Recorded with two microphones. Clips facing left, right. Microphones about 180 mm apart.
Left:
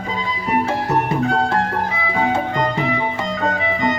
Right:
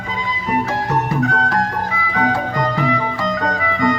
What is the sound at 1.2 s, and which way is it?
Music, 30° left (ahead or behind).